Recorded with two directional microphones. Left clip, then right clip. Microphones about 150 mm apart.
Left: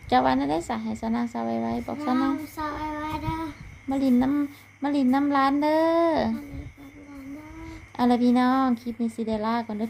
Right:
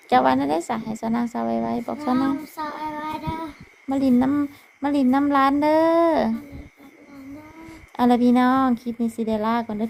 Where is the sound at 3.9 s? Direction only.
20° right (ahead or behind).